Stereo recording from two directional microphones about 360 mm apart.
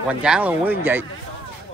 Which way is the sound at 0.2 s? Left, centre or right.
Centre.